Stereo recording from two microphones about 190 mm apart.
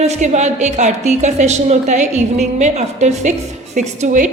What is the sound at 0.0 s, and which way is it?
A woman's voice, 35° right (ahead or behind).